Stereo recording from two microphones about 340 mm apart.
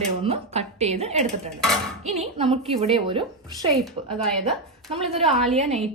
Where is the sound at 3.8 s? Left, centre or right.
Centre.